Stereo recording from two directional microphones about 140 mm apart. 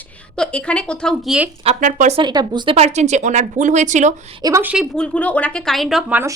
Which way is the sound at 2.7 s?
50° right (ahead or behind).